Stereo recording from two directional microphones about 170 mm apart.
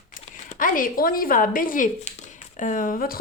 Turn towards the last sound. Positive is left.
turn(degrees=55)  # may be behind; listen again after turning